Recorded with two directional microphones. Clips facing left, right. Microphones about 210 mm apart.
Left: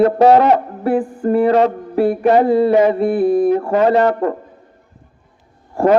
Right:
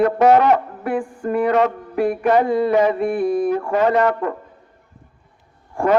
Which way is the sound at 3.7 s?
35° left (ahead or behind).